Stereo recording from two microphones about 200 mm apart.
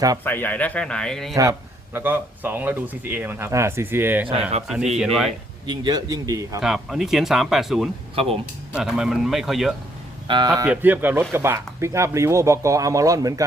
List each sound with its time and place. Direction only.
0.3 s speech: 10° left (ahead or behind)
1.4 s speech: 15° right (ahead or behind)
4.3 s a man's voice: 30° right (ahead or behind)
4.9 s speech: centre (ahead or behind)
5.6 s speech: 20° right (ahead or behind)
6.6 s speech: centre (ahead or behind)
8.1 s a man's voice: 30° right (ahead or behind)
8.7 s speech: 5° right (ahead or behind)
10.2 s a man's voice: 25° right (ahead or behind)
10.7 s speech: 10° right (ahead or behind)